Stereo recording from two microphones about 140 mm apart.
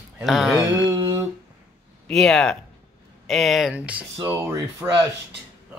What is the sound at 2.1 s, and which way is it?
Speech, 5° left (ahead or behind).